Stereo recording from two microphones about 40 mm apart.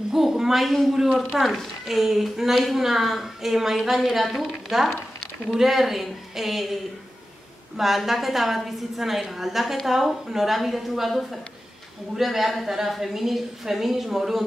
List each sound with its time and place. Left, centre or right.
0.1 s a woman's voice: centre
12.2 s a woman's voice: centre